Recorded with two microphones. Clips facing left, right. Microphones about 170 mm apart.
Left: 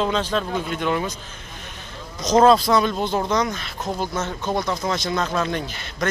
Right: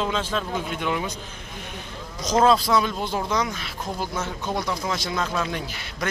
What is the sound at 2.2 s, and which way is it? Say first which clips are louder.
A man's voice: left 4 dB; 5° right (ahead or behind).